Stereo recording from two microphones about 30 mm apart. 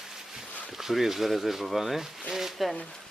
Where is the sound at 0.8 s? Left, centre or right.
Centre.